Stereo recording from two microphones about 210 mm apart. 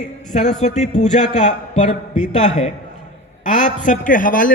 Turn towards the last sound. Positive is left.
turn(degrees=40)  # may be behind; listen again after turning